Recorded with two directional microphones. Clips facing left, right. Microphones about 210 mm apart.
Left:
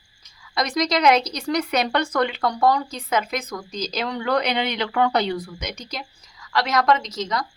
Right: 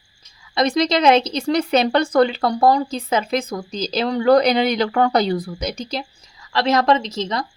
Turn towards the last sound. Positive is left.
turn(degrees=-25)  # may be behind; listen again after turning